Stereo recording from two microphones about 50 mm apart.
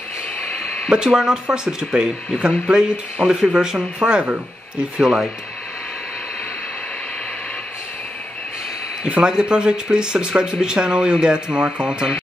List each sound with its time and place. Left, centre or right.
0.8 s speech: centre
9.0 s speech: centre